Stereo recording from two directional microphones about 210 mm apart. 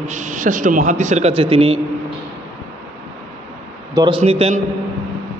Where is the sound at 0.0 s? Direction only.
35° right (ahead or behind).